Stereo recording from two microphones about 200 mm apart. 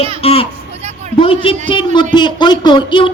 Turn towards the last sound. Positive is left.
turn(degrees=25)  # may be behind; listen again after turning